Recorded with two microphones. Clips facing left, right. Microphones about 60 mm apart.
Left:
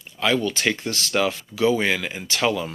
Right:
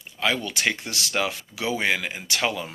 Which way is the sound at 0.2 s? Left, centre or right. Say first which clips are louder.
Left 3 dB; right.